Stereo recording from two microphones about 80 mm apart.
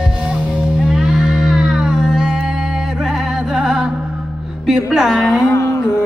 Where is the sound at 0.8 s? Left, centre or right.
Centre.